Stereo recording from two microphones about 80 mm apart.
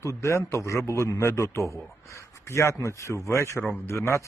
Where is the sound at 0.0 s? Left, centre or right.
Left.